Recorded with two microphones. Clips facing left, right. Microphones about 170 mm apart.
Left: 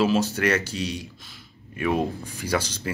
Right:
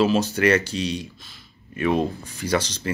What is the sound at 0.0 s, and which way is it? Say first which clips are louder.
Speech: right 2 dB; centre (ahead or behind).